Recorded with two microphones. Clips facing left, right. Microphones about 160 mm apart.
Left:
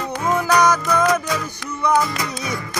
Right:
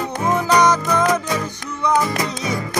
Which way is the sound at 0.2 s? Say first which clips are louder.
Right 1 dB; 20° right (ahead or behind).